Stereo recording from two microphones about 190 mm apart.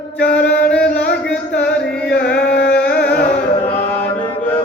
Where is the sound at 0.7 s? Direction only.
5° left (ahead or behind).